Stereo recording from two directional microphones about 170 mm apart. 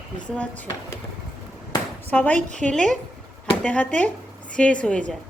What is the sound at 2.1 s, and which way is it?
Speech, 10° left (ahead or behind).